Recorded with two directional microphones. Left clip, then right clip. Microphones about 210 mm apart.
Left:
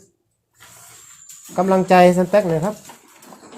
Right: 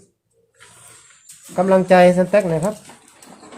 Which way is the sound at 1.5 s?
15° left (ahead or behind).